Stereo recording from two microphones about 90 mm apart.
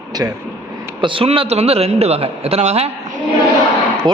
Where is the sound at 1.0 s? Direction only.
75° right (ahead or behind).